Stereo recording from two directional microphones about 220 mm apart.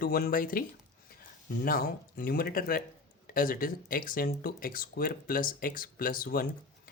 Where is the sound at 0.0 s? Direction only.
40° left (ahead or behind).